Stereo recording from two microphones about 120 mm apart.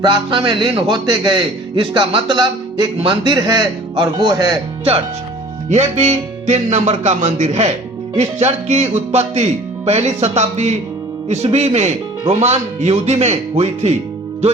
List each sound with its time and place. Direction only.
0.0 s a man's voice: 40° right (ahead or behind)
5.6 s speech: 70° right (ahead or behind)